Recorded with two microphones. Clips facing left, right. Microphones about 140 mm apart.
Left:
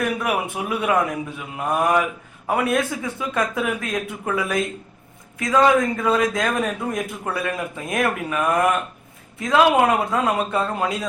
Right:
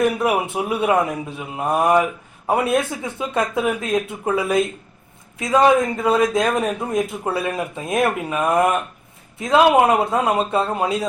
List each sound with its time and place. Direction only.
0.0 s speech: 25° right (ahead or behind)